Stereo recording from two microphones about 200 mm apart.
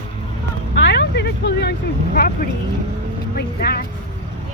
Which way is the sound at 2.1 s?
45° left (ahead or behind).